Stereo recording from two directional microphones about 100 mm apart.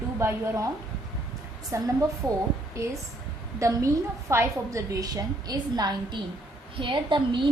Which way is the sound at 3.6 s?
30° right (ahead or behind).